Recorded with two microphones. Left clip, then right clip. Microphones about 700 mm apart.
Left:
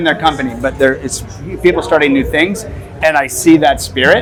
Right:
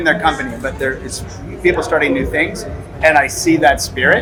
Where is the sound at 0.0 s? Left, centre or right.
Left.